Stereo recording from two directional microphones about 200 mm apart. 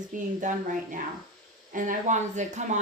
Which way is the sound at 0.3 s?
40° right (ahead or behind).